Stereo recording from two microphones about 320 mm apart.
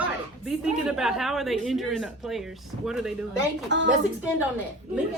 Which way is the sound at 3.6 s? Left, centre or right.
Right.